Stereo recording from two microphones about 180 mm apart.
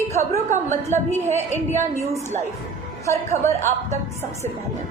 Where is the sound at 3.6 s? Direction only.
40° right (ahead or behind).